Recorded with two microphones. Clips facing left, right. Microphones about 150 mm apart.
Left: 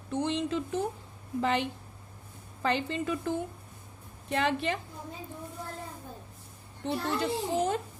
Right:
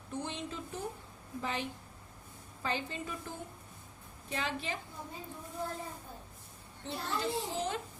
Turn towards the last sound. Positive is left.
turn(degrees=60)  # may be behind; listen again after turning